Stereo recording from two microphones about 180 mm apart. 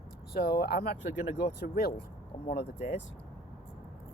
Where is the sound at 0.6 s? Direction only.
60° left (ahead or behind).